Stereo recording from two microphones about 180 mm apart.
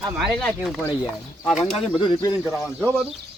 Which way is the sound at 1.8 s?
25° left (ahead or behind).